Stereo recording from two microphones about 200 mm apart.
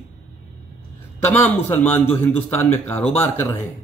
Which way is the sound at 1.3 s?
10° left (ahead or behind).